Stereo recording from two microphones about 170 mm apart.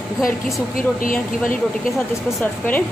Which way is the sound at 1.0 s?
55° left (ahead or behind).